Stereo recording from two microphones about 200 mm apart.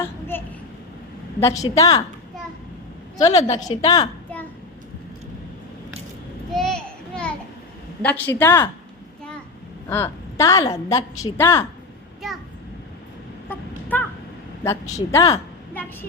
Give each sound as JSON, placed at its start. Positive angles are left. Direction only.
{"t": 0.0, "sound": "child singing", "side_deg": 10}
{"t": 1.4, "sound": "a woman's voice", "side_deg": 15}
{"t": 3.2, "sound": "a woman's voice", "side_deg": 15}
{"t": 6.5, "sound": "a sound", "side_deg": 0}
{"t": 8.0, "sound": "a woman's voice", "side_deg": 10}
{"t": 9.9, "sound": "a woman's voice", "side_deg": 15}
{"t": 13.5, "sound": "a sound", "side_deg": 10}
{"t": 14.6, "sound": "a woman's voice", "side_deg": 15}